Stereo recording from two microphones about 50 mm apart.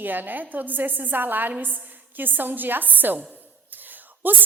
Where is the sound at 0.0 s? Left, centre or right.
Right.